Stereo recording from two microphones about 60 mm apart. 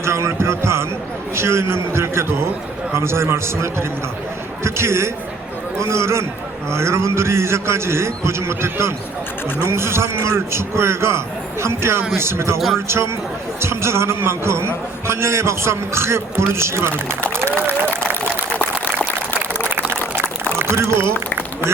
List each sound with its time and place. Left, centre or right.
0.0 s a sound: right
1.4 s a man's voice: right
12.5 s speech: centre
13.6 s a man's voice: right
20.6 s speech: right